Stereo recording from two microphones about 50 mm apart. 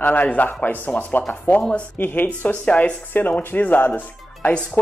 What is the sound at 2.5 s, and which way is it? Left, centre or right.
Speech, left.